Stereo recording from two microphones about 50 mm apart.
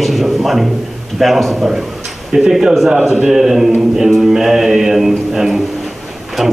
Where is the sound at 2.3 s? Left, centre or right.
Centre.